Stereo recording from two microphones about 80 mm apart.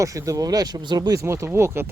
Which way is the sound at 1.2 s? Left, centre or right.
Right.